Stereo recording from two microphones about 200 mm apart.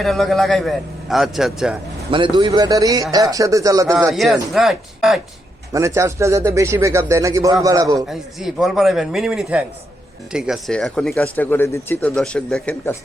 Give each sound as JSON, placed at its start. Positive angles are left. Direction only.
{"t": 0.0, "sound": "speech", "side_deg": 0}
{"t": 2.0, "sound": "speech", "side_deg": -25}
{"t": 4.1, "sound": "speech", "side_deg": 0}
{"t": 5.7, "sound": "speech", "side_deg": -15}
{"t": 7.9, "sound": "speech", "side_deg": 0}